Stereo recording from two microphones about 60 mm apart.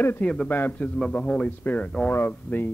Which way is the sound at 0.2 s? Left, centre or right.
Centre.